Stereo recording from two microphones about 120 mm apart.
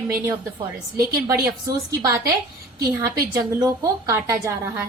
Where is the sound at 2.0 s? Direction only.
30° right (ahead or behind).